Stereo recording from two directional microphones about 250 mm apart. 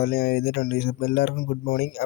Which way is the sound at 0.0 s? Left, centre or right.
Left.